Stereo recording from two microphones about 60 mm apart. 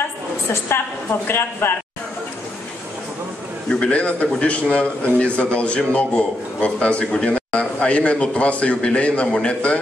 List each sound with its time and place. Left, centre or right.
0.5 s a woman's voice: left
3.8 s a man's voice: left